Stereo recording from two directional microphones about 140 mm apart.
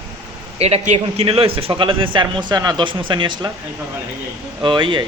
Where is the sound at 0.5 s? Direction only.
50° right (ahead or behind); by 3.5 s 35° right (ahead or behind).